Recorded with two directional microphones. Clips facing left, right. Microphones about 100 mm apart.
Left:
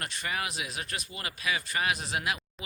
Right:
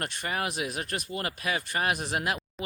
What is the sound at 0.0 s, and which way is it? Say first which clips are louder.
Speech: right 3 dB; 45° right (ahead or behind).